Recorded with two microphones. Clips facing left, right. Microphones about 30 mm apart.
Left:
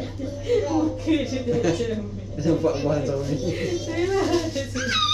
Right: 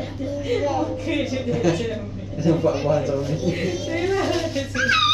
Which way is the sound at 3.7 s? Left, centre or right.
Right.